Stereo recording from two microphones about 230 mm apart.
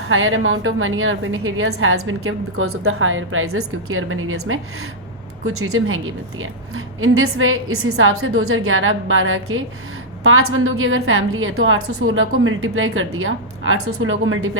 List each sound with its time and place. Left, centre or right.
0.1 s a woman's voice: right